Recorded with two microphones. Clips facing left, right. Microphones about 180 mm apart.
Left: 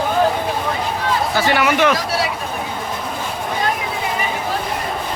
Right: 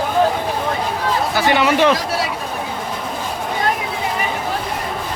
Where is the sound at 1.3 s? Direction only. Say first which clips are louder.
Right 2 dB; 20° right (ahead or behind).